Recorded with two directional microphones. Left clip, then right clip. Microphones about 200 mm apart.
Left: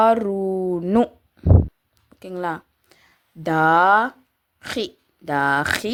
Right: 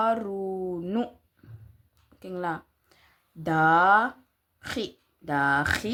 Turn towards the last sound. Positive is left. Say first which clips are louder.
# left 4 dB
turn(degrees=40)  # may be behind; listen again after turning